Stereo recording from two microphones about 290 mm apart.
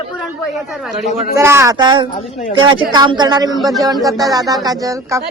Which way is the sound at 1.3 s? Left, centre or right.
Centre.